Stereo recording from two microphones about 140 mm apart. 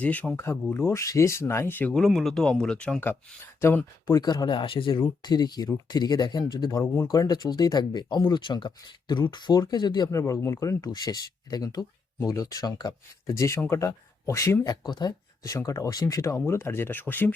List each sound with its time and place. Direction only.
0.0 s speech: 10° left (ahead or behind)